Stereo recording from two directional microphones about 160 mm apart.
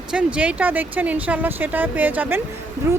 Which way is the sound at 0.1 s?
5° right (ahead or behind).